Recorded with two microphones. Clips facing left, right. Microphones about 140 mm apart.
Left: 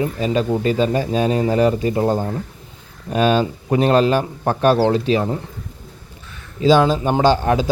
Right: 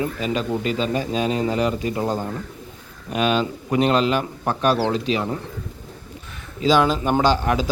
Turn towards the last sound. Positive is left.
turn(degrees=30)  # may be behind; listen again after turning